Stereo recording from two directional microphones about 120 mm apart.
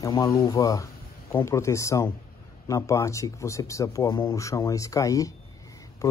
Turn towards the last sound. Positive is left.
turn(degrees=25)  # may be behind; listen again after turning